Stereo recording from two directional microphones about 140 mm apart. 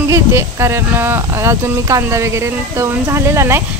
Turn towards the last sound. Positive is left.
turn(degrees=-20)  # may be behind; listen again after turning